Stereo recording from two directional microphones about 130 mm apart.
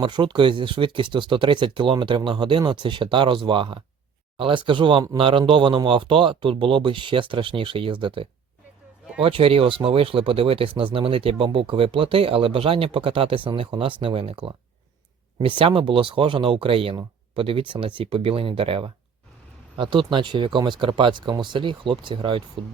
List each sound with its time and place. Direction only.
0.0 s speech: 40° right (ahead or behind)
15.4 s speech: 40° right (ahead or behind)